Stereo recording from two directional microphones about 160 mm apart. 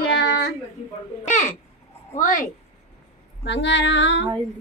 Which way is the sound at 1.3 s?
50° left (ahead or behind).